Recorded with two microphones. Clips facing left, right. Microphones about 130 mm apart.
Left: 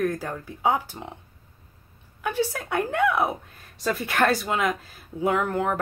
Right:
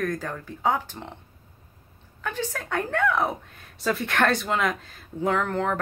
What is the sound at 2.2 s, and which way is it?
Speech, 10° left (ahead or behind).